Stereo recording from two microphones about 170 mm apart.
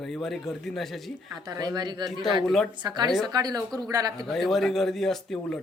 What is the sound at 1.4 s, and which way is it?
A woman's voice, 25° right (ahead or behind).